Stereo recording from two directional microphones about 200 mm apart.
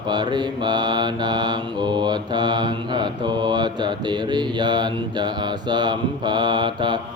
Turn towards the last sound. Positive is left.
turn(degrees=-25)  # may be behind; listen again after turning